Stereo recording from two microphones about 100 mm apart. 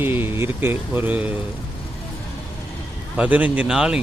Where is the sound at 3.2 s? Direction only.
15° right (ahead or behind).